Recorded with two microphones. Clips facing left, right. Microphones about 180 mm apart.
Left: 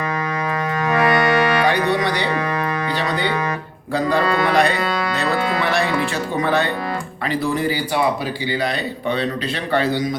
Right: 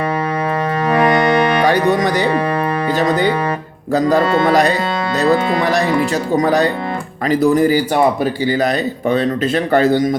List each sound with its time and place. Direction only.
0.9 s music: 30° right (ahead or behind)
1.6 s music: 45° right (ahead or behind)
3.0 s speech: 45° right (ahead or behind)